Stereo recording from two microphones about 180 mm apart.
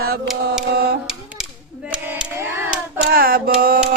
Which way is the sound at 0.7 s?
60° right (ahead or behind).